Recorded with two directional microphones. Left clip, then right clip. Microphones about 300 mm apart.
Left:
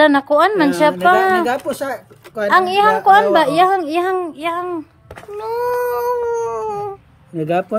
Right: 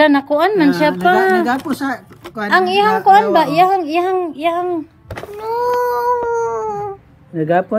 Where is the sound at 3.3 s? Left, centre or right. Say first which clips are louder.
Right 1 dB; centre.